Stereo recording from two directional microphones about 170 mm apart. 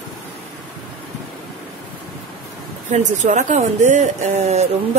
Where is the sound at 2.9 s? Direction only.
45° right (ahead or behind).